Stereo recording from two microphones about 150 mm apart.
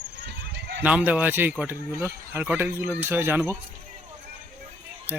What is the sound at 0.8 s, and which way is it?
Speech, 10° right (ahead or behind).